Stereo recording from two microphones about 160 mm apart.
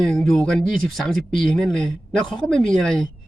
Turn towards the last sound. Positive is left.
turn(degrees=5)  # may be behind; listen again after turning